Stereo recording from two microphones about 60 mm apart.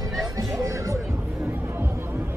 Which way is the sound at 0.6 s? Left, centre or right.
Right.